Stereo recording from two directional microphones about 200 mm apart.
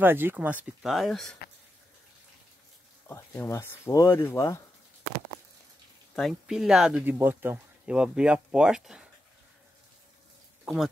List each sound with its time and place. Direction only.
0.0 s speech: 10° right (ahead or behind)
3.1 s speech: 10° left (ahead or behind)
6.1 s speech: centre (ahead or behind)
10.6 s a sound: centre (ahead or behind)